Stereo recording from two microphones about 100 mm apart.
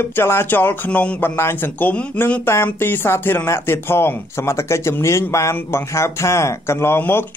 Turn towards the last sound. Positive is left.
turn(degrees=20)  # may be behind; listen again after turning